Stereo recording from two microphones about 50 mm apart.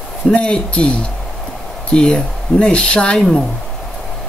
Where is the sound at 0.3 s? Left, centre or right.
Left.